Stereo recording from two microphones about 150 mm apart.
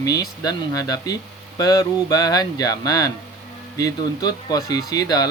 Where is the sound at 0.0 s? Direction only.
25° left (ahead or behind).